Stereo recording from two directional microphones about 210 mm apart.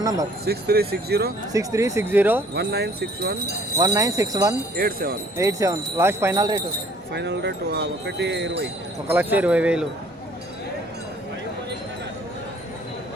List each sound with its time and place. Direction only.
0.0 s speech: 15° right (ahead or behind)
0.4 s wind chime: 50° right (ahead or behind)
1.5 s speech: 15° right (ahead or behind)
2.6 s wind chime: 50° right (ahead or behind)
3.8 s speech: 15° right (ahead or behind)
4.8 s wind chime: 45° right (ahead or behind)
5.4 s speech: 15° right (ahead or behind)
7.1 s wind chime: 55° right (ahead or behind)
9.0 s speech: 10° right (ahead or behind)